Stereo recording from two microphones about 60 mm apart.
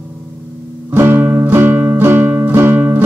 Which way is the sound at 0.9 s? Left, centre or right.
Right.